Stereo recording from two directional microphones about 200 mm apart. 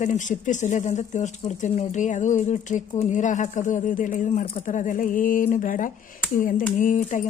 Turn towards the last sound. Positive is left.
turn(degrees=40)  # may be behind; listen again after turning